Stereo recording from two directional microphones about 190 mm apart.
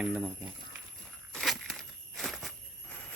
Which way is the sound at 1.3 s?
Centre (ahead or behind).